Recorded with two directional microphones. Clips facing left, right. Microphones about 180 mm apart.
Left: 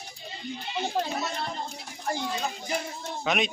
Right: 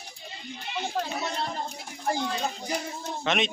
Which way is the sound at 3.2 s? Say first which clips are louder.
Even; centre (ahead or behind).